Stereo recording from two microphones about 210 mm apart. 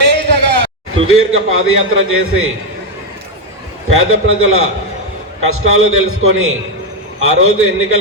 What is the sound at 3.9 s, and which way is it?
A man's voice, 70° right (ahead or behind).